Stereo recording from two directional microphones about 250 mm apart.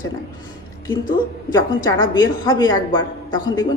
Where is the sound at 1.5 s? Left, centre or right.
Centre.